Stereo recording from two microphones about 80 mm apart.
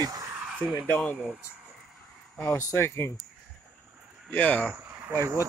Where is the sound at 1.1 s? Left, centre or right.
Centre.